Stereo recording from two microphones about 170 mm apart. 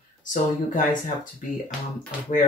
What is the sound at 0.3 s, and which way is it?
Speech, 50° left (ahead or behind).